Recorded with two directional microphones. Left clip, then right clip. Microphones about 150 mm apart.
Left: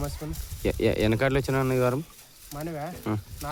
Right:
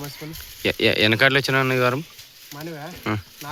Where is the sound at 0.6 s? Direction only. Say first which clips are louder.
Right 6 dB; 5° left (ahead or behind).